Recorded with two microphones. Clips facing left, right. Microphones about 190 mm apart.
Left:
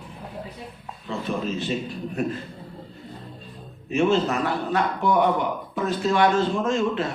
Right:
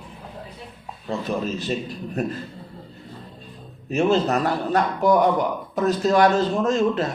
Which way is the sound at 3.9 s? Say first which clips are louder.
Right 1 dB; 40° right (ahead or behind).